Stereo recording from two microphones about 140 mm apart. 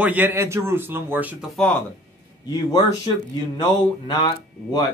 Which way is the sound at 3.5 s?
30° left (ahead or behind).